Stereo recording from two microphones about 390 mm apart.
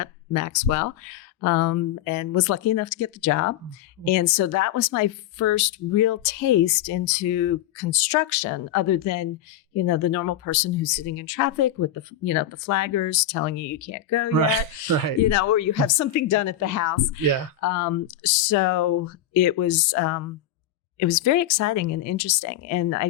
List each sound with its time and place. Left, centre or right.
0.0 s a woman's voice: left